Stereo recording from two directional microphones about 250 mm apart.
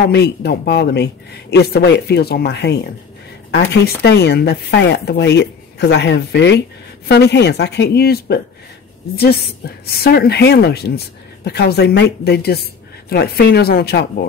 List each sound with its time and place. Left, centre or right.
0.1 s speech: left